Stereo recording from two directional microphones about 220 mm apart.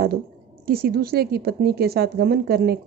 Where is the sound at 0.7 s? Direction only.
40° right (ahead or behind).